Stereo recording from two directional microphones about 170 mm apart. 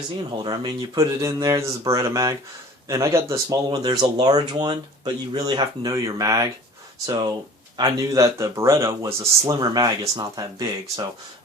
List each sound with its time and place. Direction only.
0.4 s speech: 25° right (ahead or behind)